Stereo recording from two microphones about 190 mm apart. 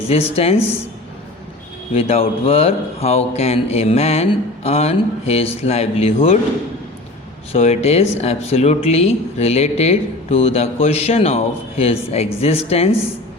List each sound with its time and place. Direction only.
0.1 s speech: 30° left (ahead or behind)
1.9 s speech: 35° left (ahead or behind)
7.5 s speech: 35° left (ahead or behind)